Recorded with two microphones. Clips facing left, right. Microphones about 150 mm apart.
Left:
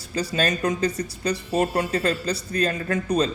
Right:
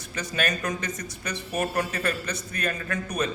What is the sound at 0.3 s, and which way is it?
A man's voice, 30° left (ahead or behind).